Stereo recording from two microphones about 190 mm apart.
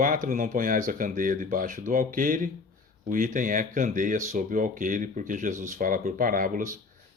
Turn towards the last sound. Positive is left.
turn(degrees=-45)  # may be behind; listen again after turning